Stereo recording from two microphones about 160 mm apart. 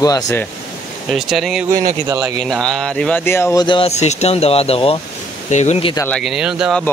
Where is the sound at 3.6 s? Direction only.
35° left (ahead or behind).